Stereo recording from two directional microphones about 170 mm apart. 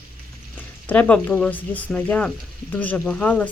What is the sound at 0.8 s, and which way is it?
Speech, 10° left (ahead or behind).